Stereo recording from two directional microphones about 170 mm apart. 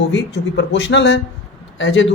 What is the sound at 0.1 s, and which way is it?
Speech, 90° left.